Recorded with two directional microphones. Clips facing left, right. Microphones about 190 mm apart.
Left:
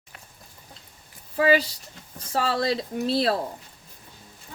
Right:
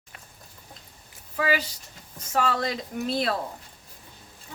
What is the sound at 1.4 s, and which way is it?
Speech, 35° left (ahead or behind).